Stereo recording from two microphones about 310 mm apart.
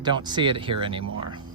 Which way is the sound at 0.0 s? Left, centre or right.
Centre.